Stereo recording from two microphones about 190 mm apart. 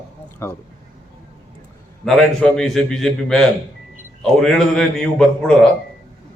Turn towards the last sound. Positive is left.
turn(degrees=5)  # may be behind; listen again after turning